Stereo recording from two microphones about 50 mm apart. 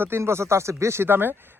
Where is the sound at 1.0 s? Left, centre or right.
Right.